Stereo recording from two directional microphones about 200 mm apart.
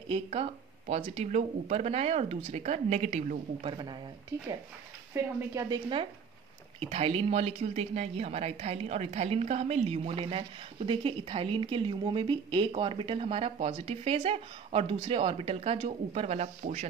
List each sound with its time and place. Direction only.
0.1 s speech: 30° right (ahead or behind)
3.7 s a woman's voice: 20° right (ahead or behind)
5.1 s a woman's voice: 15° right (ahead or behind); by 16.8 s 35° right (ahead or behind)